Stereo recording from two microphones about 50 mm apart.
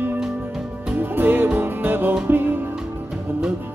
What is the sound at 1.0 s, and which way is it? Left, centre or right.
Music, right.